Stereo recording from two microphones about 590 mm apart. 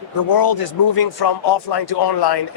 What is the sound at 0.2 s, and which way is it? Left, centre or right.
Speech, left.